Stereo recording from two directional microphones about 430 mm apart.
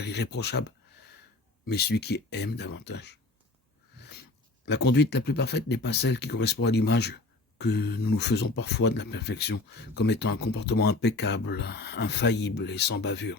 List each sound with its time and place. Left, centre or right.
0.0 s speech: left
1.6 s speech: left